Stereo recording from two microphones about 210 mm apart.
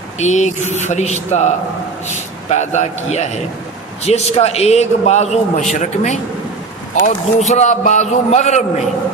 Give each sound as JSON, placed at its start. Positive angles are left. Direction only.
{"t": 0.2, "sound": "a man's voice", "side_deg": 35}
{"t": 2.5, "sound": "a man's voice", "side_deg": 35}